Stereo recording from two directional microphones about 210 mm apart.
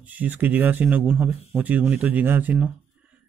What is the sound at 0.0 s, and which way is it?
Speech, 10° right (ahead or behind).